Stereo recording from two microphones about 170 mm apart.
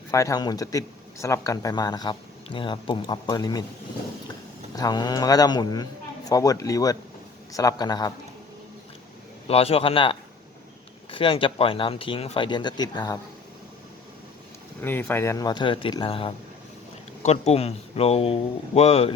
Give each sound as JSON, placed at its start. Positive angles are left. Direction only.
{"t": 0.1, "sound": "speech", "side_deg": 20}
{"t": 4.7, "sound": "speech", "side_deg": 25}
{"t": 9.5, "sound": "speech", "side_deg": 35}
{"t": 14.8, "sound": "speech", "side_deg": 10}